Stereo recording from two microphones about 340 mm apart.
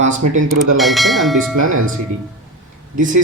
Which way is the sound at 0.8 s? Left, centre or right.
Centre.